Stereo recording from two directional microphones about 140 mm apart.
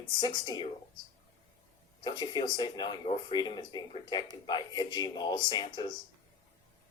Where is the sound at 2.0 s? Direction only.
30° left (ahead or behind).